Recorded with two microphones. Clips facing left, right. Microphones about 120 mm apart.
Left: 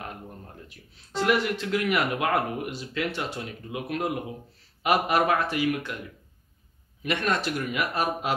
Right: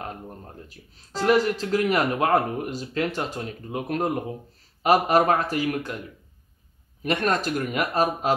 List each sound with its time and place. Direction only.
0.7 s speech: 35° right (ahead or behind)
7.0 s speech: 40° right (ahead or behind)